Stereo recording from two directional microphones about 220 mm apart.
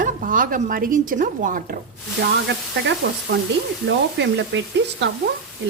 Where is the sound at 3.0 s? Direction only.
55° right (ahead or behind).